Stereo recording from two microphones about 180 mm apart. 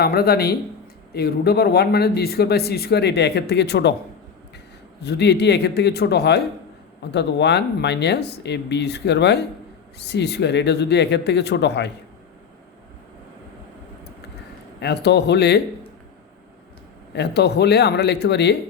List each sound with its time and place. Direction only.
0.0 s speech: 60° left (ahead or behind)
5.0 s speech: 70° left (ahead or behind)
14.8 s speech: 70° left (ahead or behind)
17.2 s speech: 65° left (ahead or behind)